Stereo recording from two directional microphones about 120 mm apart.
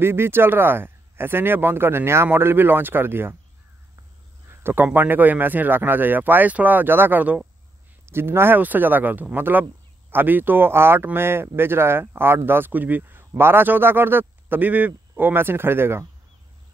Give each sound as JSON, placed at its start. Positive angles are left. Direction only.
{"t": 0.0, "sound": "speech", "side_deg": -20}
{"t": 4.6, "sound": "speech", "side_deg": -15}